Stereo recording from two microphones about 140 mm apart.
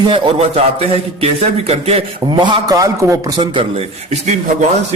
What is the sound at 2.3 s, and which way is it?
A man's voice, 30° right (ahead or behind).